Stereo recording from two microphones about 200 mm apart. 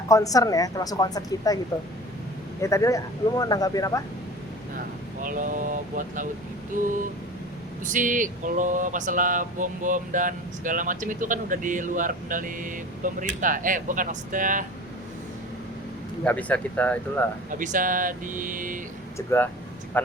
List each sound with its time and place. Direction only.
0.1 s a woman's voice: 15° left (ahead or behind)
2.6 s a woman's voice: 15° left (ahead or behind)
5.2 s speech: 40° right (ahead or behind)
7.9 s speech: 40° right (ahead or behind)
16.2 s a woman's voice: 5° left (ahead or behind)
17.5 s speech: 40° right (ahead or behind)
19.1 s a woman's voice: 10° left (ahead or behind)